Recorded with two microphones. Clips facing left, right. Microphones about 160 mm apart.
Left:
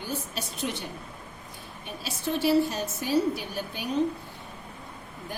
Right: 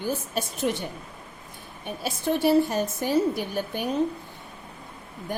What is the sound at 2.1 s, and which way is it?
A woman's voice, 50° right (ahead or behind).